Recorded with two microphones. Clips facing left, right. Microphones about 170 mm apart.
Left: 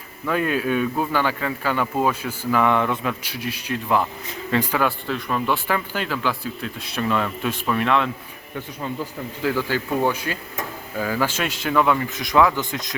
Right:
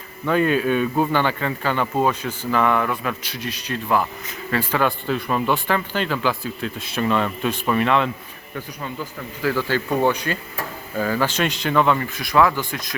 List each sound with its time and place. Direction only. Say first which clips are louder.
0.3 s speech: right 3 dB; 5° left (ahead or behind)
5.6 s speech: right 2 dB; 10° left (ahead or behind)
8.5 s speech: left 1 dB; 20° left (ahead or behind); by 11.9 s 5° left (ahead or behind)
12.0 s speech: even; 20° left (ahead or behind)